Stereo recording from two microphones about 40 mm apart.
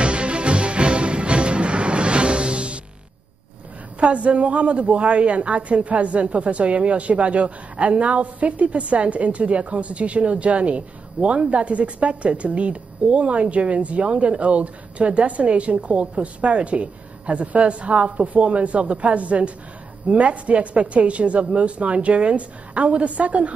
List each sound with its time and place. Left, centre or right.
0.0 s music: right
4.0 s a woman's voice: right